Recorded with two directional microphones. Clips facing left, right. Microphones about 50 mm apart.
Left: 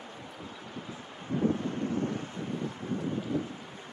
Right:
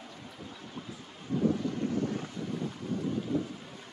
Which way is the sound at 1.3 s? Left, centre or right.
Left.